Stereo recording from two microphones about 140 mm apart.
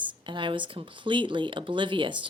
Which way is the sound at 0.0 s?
35° right (ahead or behind).